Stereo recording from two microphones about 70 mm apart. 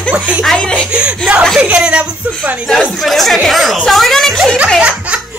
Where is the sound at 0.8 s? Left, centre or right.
Centre.